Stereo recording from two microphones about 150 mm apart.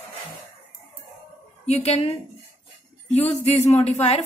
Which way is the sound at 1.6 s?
45° left (ahead or behind).